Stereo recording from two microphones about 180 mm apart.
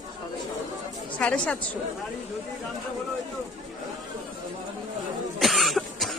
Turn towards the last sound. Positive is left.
turn(degrees=0)  # may be behind; listen again after turning